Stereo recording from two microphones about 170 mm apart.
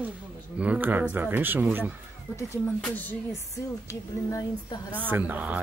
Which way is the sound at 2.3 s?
15° left (ahead or behind).